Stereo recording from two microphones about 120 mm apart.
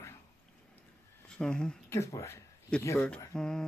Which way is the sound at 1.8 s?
25° left (ahead or behind).